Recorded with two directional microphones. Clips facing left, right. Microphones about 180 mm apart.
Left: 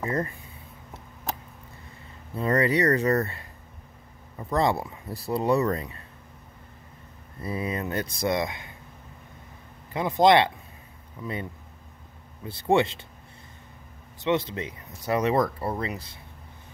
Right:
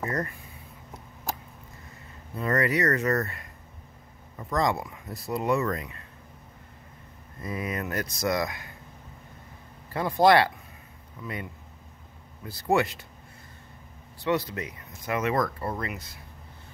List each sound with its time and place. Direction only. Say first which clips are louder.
0.0 s speech: left 2 dB; 20° left (ahead or behind)
2.3 s speech: left 3 dB; 30° left (ahead or behind)
7.4 s speech: left 2 dB; 30° left (ahead or behind)
9.8 s speech: left 1 dB; 20° left (ahead or behind)
11.2 s speech: left 3 dB; 30° left (ahead or behind)
12.4 s speech: left 2 dB; 25° left (ahead or behind)
14.2 s speech: left 2 dB; 25° left (ahead or behind)